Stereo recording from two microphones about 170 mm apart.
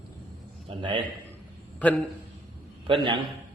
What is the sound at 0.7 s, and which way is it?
Speech, 30° right (ahead or behind).